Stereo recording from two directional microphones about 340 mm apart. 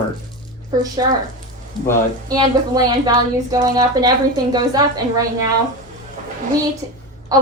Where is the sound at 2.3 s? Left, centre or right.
Centre.